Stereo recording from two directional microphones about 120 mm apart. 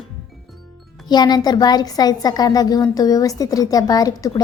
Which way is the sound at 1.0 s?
35° left (ahead or behind).